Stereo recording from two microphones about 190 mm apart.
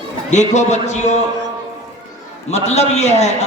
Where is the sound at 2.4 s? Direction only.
35° left (ahead or behind).